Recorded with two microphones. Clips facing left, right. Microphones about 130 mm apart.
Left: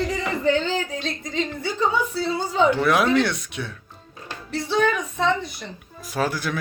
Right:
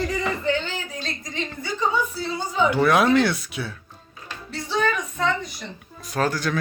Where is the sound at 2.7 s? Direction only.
Centre (ahead or behind).